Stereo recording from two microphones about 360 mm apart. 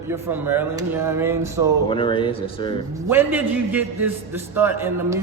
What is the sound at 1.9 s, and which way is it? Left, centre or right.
Speech, centre.